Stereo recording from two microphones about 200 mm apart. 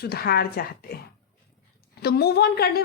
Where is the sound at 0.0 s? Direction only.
50° left (ahead or behind).